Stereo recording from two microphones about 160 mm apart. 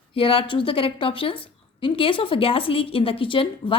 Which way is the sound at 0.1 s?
35° left (ahead or behind).